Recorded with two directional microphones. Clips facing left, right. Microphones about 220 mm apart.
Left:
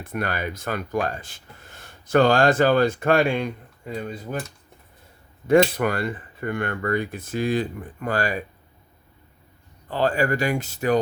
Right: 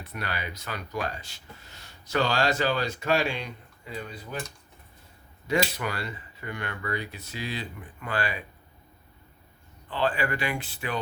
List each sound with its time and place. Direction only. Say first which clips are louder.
0.0 s speech: left 8 dB; 50° left (ahead or behind)
5.5 s speech: left 10 dB; 50° left (ahead or behind)
9.9 s speech: left 6 dB; 45° left (ahead or behind)